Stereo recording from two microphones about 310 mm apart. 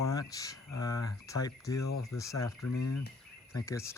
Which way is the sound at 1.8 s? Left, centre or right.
Left.